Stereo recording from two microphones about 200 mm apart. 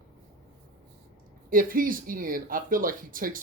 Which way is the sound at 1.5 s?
45° right (ahead or behind).